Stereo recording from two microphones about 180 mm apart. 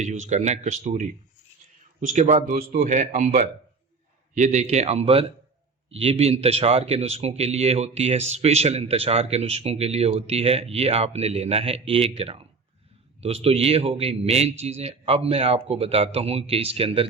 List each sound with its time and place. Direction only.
0.0 s speech: 40° right (ahead or behind)